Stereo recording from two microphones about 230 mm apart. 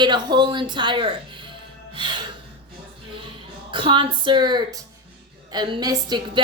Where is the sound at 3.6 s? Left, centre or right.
Right.